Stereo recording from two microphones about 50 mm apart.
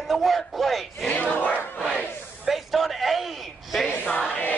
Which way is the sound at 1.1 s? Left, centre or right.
Left.